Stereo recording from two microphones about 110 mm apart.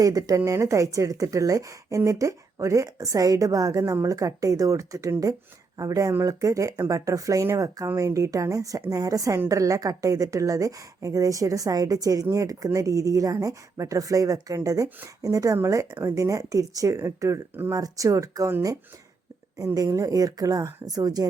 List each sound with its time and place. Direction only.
0.0 s a woman's voice: 35° right (ahead or behind)
19.5 s a woman's voice: 35° right (ahead or behind)